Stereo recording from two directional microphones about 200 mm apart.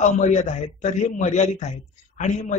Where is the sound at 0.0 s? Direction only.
35° left (ahead or behind).